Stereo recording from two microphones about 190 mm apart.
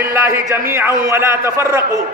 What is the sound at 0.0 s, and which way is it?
A man's voice, 15° right (ahead or behind).